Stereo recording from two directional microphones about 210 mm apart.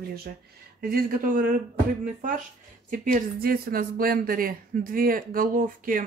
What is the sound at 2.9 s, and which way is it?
Speech, 40° right (ahead or behind).